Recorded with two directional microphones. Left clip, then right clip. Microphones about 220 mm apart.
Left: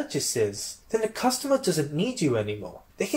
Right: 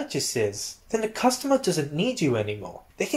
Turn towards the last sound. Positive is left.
turn(degrees=-25)  # may be behind; listen again after turning